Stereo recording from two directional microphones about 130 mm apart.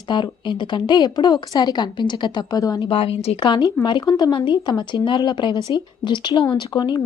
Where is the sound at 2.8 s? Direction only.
45° left (ahead or behind).